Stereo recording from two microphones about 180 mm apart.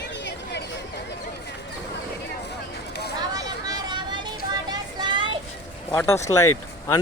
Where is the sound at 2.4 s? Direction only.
65° left (ahead or behind).